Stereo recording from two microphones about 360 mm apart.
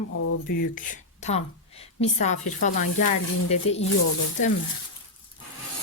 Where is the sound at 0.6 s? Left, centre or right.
Left.